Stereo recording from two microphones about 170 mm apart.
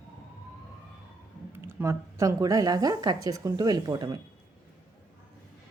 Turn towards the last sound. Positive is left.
turn(degrees=-25)  # may be behind; listen again after turning